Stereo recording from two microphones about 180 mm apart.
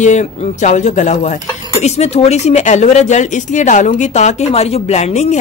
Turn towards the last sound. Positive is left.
turn(degrees=40)  # may be behind; listen again after turning